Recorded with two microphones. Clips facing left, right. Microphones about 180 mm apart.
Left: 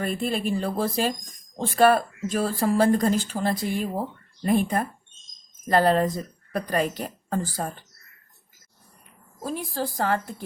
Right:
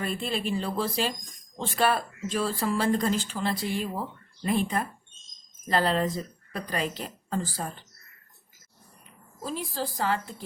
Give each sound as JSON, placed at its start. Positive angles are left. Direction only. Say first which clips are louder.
{"t": 0.0, "sound": "a woman's voice", "louder": "left 4 dB", "side_deg": 45}
{"t": 9.4, "sound": "speech", "louder": "left 3 dB", "side_deg": 50}